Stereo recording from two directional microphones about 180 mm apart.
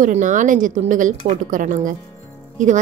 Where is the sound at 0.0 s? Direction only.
45° right (ahead or behind).